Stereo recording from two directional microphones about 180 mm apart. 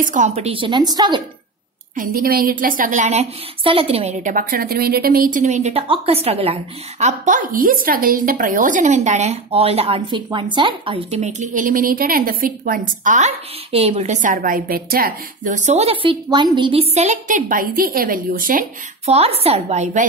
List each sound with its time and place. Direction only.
0.0 s a woman's voice: 45° right (ahead or behind); by 1.2 s 25° right (ahead or behind)
2.0 s a woman's voice: 55° right (ahead or behind); by 11.1 s 30° right (ahead or behind)
11.1 s a woman's voice: 40° right (ahead or behind)
19.0 s a woman's voice: 35° right (ahead or behind)